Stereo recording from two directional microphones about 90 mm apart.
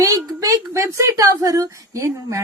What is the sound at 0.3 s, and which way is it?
A woman's voice, 35° right (ahead or behind).